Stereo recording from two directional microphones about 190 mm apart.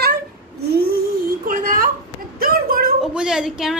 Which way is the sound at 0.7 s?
55° right (ahead or behind).